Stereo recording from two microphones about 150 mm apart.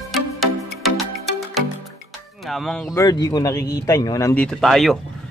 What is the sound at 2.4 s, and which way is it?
Speech, centre (ahead or behind).